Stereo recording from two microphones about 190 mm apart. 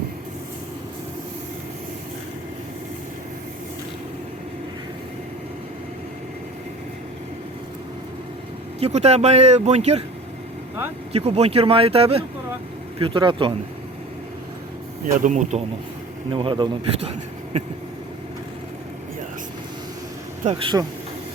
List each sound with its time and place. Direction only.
8.8 s speech: 35° right (ahead or behind)
11.1 s a man's voice: 35° right (ahead or behind)
15.0 s speech: 40° right (ahead or behind)
16.3 s a man's voice: 25° right (ahead or behind)
20.4 s a man's voice: 30° right (ahead or behind)